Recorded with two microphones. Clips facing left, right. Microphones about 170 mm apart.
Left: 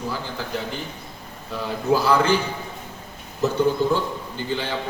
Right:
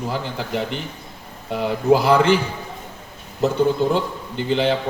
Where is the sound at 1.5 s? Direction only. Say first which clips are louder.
Right 5 dB; 80° right.